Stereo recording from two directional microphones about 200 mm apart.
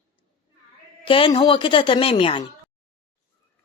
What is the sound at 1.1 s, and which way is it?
Speech, 25° left (ahead or behind).